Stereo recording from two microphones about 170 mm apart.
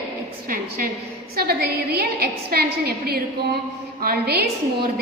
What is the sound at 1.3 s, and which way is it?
A woman's voice, 70° right (ahead or behind).